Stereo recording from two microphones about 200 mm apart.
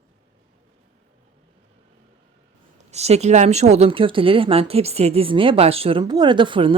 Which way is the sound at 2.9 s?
35° right (ahead or behind).